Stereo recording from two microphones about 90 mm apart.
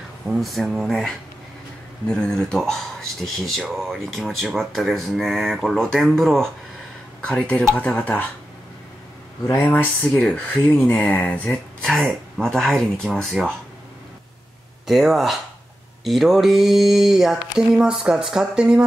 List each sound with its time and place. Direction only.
0.3 s speech: centre (ahead or behind); by 8.3 s 15° left (ahead or behind)
9.6 s speech: 15° left (ahead or behind)
11.4 s speech: 5° left (ahead or behind)
14.9 s speech: centre (ahead or behind)